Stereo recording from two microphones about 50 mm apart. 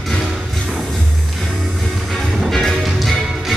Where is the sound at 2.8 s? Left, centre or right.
Centre.